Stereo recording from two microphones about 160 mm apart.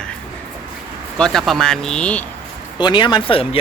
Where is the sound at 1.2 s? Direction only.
5° left (ahead or behind).